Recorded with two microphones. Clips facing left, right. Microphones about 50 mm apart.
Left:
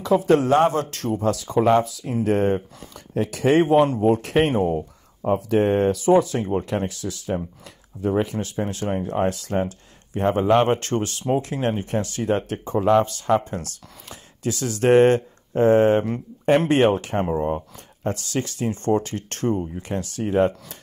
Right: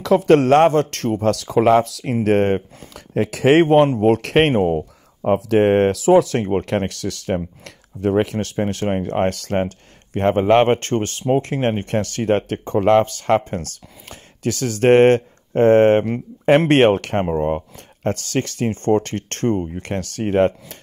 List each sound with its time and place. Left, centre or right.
0.0 s speech: right
2.2 s speech: right
4.6 s speech: right
11.8 s speech: right
16.5 s speech: right
17.4 s speech: right